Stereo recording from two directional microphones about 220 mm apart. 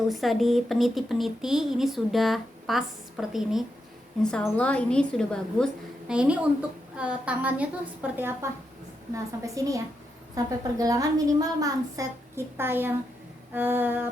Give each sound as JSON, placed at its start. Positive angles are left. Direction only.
{"t": 0.1, "sound": "speech", "side_deg": 0}
{"t": 9.6, "sound": "a woman's voice", "side_deg": -15}